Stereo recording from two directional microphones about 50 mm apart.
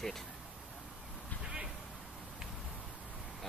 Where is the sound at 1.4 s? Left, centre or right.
Centre.